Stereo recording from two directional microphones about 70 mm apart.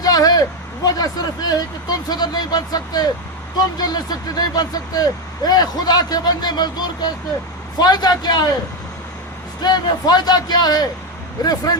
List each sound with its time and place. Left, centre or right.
0.0 s a sound: left
0.9 s speech: left
7.8 s speech: left
9.6 s speech: left
11.4 s speech: left